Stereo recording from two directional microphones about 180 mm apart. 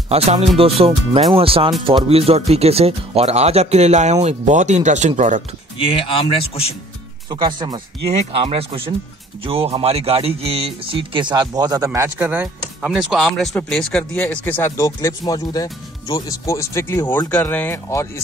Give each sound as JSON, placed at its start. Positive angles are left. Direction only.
{"t": 0.1, "sound": "speech", "side_deg": -35}
{"t": 5.8, "sound": "speech", "side_deg": 30}
{"t": 7.2, "sound": "speech", "side_deg": -25}